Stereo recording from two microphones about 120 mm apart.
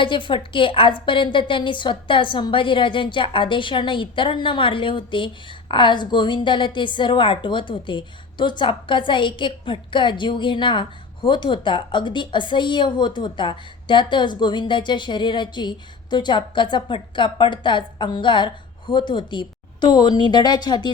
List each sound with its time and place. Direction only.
0.0 s a woman's voice: 45° left (ahead or behind)